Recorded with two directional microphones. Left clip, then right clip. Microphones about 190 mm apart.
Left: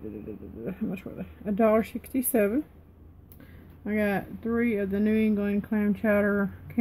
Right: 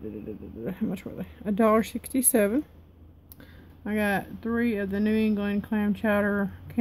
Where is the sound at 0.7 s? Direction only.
25° right (ahead or behind).